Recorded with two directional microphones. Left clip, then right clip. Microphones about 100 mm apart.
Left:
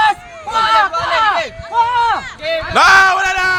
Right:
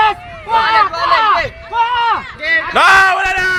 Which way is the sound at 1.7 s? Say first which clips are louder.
Even; 80° left.